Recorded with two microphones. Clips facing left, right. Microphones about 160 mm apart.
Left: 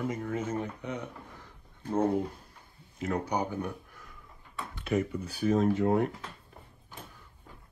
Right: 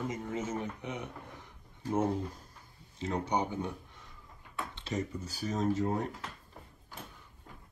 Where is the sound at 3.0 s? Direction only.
25° right (ahead or behind).